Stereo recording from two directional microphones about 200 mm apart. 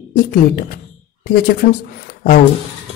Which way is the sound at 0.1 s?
45° left (ahead or behind).